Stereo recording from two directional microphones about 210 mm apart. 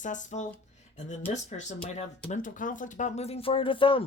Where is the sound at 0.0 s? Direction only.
35° left (ahead or behind).